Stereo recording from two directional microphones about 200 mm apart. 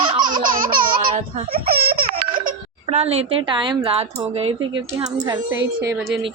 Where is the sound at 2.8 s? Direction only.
30° right (ahead or behind); by 6.0 s 15° right (ahead or behind).